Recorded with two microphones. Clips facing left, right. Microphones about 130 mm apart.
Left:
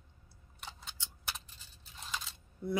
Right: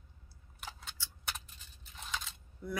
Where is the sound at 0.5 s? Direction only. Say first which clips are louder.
Right 1 dB; centre (ahead or behind).